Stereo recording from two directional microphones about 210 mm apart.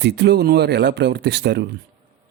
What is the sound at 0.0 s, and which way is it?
Speech, 55° right (ahead or behind).